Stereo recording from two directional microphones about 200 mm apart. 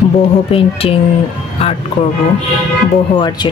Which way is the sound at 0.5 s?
30° left (ahead or behind).